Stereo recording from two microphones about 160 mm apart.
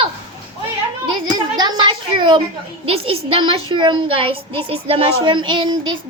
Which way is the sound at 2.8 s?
35° right (ahead or behind).